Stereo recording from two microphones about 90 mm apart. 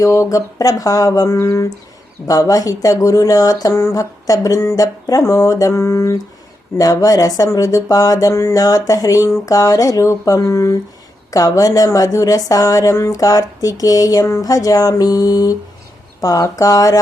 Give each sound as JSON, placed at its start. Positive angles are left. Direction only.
{"t": 0.0, "sound": "speech", "side_deg": 35}